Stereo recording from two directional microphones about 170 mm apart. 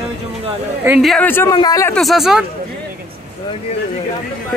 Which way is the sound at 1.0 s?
5° left (ahead or behind).